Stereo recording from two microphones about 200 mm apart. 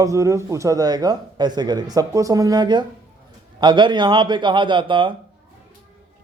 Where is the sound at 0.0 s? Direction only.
15° right (ahead or behind).